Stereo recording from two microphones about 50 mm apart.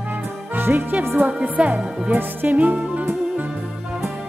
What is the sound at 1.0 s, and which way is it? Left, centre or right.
Speech, right.